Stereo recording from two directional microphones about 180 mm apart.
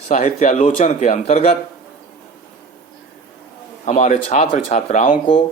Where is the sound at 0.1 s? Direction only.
40° left (ahead or behind).